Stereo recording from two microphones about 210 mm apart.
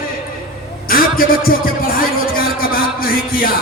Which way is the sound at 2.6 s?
45° left (ahead or behind).